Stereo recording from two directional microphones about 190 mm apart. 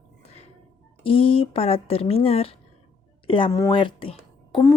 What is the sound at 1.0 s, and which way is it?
Speech, 30° left (ahead or behind).